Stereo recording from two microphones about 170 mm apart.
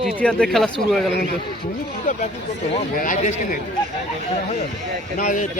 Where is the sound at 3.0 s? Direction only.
45° left (ahead or behind).